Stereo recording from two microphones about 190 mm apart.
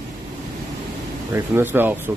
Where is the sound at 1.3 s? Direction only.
10° right (ahead or behind).